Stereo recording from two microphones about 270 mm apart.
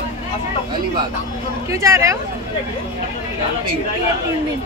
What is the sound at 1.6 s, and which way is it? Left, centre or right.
Speech, centre.